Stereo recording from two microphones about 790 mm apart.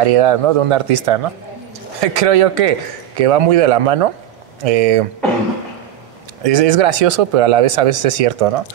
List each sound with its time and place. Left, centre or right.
0.0 s speech: right
6.4 s speech: right